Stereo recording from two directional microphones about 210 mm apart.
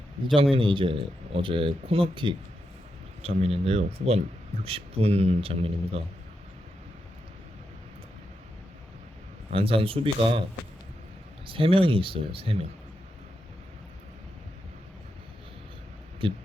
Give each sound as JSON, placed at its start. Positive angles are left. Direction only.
{"t": 0.5, "sound": "speech", "side_deg": -25}
{"t": 9.5, "sound": "speech", "side_deg": -25}
{"t": 11.4, "sound": "speech", "side_deg": -25}
{"t": 16.2, "sound": "speech", "side_deg": -25}